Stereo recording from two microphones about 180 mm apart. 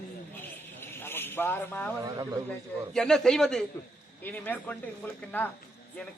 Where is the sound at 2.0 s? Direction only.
20° right (ahead or behind).